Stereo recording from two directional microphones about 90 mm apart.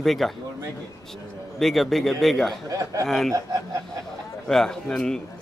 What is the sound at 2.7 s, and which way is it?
Speech, 40° right (ahead or behind).